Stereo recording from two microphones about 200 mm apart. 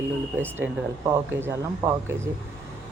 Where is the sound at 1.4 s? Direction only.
10° right (ahead or behind).